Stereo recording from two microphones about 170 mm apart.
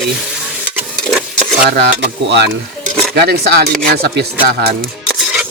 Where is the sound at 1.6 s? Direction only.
60° right (ahead or behind); by 2.4 s 80° right.